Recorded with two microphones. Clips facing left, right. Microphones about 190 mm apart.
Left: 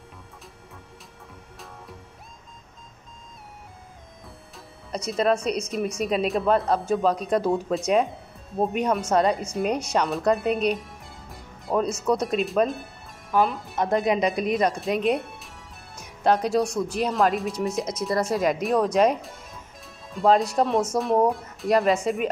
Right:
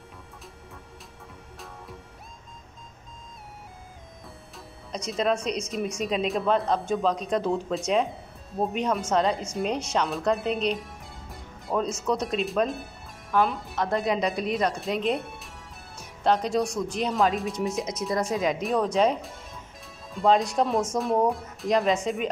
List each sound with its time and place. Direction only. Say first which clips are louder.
4.6 s speech: left 3 dB; 5° left (ahead or behind)
13.7 s speech: left 4 dB; 20° left (ahead or behind)
14.8 s speech: left 3 dB; centre (ahead or behind)
15.1 s music: left 2 dB; centre (ahead or behind)
16.3 s speech: left 2 dB; 5° left (ahead or behind)
19.2 s speech: even; centre (ahead or behind)